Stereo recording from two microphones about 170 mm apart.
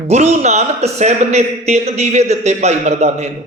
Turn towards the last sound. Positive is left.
turn(degrees=-40)  # may be behind; listen again after turning